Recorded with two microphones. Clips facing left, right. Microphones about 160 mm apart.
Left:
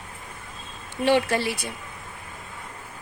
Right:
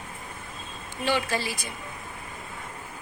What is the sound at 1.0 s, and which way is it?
Speech, 60° left (ahead or behind).